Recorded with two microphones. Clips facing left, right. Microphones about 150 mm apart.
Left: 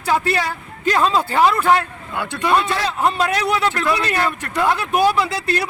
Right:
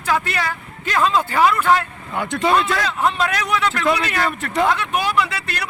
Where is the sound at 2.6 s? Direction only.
30° left (ahead or behind).